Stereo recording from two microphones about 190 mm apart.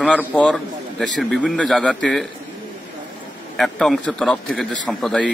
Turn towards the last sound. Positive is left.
turn(degrees=5)  # may be behind; listen again after turning